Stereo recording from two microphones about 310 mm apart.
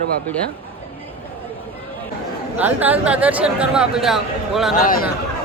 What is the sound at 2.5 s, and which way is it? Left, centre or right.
Speech, centre.